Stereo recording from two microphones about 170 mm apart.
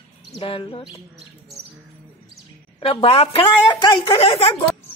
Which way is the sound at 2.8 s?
35° left (ahead or behind).